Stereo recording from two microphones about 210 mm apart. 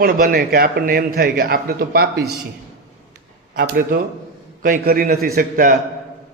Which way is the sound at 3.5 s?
45° right (ahead or behind).